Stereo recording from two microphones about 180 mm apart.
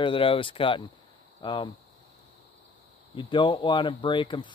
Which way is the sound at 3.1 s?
25° left (ahead or behind).